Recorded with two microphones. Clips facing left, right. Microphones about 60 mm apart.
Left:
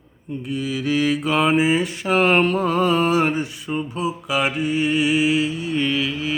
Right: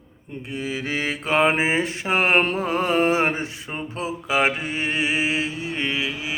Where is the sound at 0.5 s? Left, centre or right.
Right.